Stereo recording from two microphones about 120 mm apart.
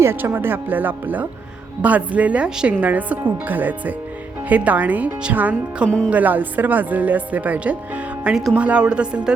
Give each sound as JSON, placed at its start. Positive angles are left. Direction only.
{"t": 0.0, "sound": "speech", "side_deg": -20}